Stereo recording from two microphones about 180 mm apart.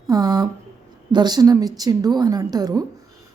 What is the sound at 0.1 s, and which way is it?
A woman's voice, 20° right (ahead or behind).